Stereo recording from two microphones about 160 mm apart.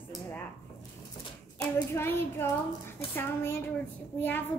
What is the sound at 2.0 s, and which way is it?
Speech, 15° left (ahead or behind).